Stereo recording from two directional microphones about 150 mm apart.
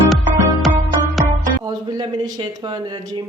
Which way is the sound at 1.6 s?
30° right (ahead or behind).